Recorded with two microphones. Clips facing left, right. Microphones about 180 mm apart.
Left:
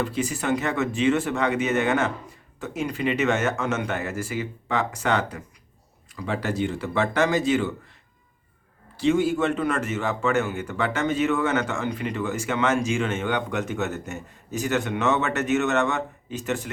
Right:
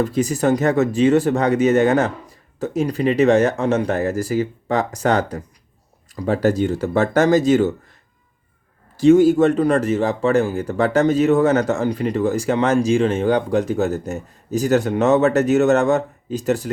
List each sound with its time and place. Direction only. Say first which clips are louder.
0.0 s a man's voice: right 8 dB; 40° right (ahead or behind)
9.0 s a man's voice: right 9 dB; 40° right (ahead or behind)